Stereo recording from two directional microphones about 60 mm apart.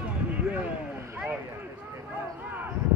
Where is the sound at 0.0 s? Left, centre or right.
Right.